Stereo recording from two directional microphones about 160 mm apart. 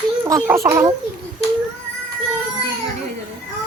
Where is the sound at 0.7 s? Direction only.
20° right (ahead or behind).